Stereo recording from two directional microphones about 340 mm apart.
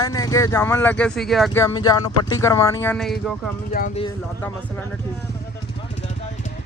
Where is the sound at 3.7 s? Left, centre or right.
Left.